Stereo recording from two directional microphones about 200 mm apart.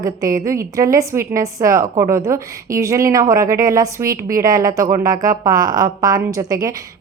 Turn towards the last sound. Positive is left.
turn(degrees=-15)  # may be behind; listen again after turning